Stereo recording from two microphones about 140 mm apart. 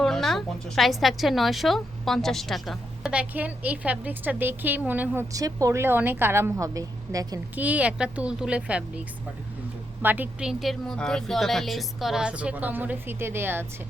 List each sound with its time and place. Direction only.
0.0 s a woman's voice: centre (ahead or behind)
5.3 s a woman's voice: 25° right (ahead or behind)
7.5 s a woman's voice: 10° right (ahead or behind)
10.0 s a woman's voice: 15° right (ahead or behind)